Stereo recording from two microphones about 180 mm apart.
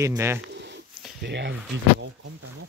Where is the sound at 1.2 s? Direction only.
70° right (ahead or behind).